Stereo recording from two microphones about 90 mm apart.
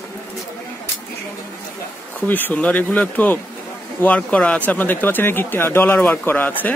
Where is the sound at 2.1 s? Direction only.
20° left (ahead or behind).